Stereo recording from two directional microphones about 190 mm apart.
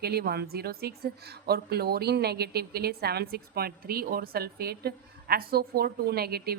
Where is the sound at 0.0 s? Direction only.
55° right (ahead or behind).